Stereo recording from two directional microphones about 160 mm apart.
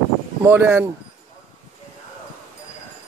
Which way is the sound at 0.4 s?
15° right (ahead or behind).